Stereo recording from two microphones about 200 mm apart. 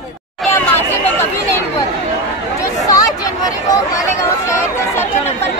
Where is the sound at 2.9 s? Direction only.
15° left (ahead or behind).